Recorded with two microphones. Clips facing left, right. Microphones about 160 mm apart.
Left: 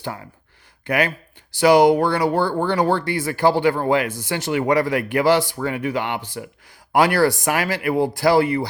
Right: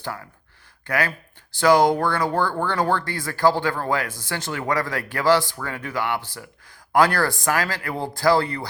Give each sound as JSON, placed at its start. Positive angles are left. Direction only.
{"t": 0.0, "sound": "speech", "side_deg": 20}